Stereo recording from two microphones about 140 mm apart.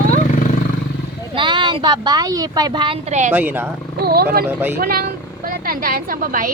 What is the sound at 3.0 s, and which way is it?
Speech, 55° right (ahead or behind).